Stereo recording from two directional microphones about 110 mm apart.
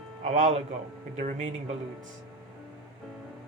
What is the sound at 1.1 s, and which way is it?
Speech, 90° right.